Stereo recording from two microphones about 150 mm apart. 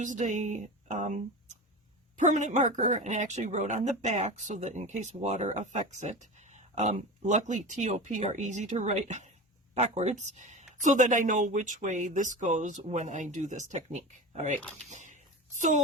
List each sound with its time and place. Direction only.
0.0 s speech: 55° right (ahead or behind)